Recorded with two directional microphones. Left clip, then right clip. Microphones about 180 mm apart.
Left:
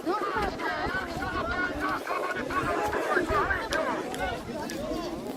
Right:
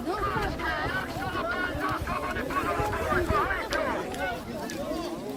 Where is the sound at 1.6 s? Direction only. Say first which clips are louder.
Even; 35° right (ahead or behind).